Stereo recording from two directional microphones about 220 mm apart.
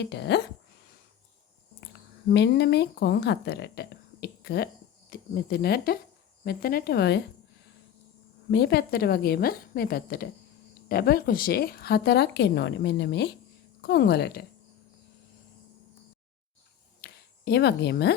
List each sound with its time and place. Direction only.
0.0 s speech: 50° left (ahead or behind)
2.3 s speech: 50° left (ahead or behind)
8.4 s speech: 50° left (ahead or behind)
17.0 s a sound: 50° left (ahead or behind)